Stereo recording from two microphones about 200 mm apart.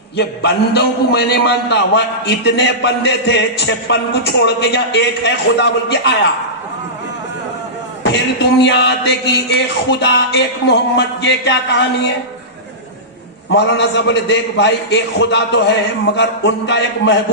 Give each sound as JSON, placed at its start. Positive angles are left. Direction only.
{"t": 0.2, "sound": "a man's voice", "side_deg": 55}
{"t": 8.4, "sound": "a man's voice", "side_deg": 60}
{"t": 13.5, "sound": "a man's voice", "side_deg": 60}